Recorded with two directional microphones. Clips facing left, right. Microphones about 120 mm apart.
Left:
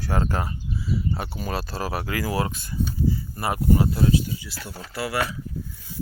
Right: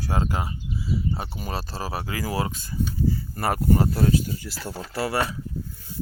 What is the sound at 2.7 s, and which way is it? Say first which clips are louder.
Speech: even; 50° right (ahead or behind).